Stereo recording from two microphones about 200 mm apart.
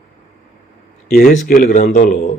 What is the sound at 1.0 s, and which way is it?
Speech, 45° left (ahead or behind).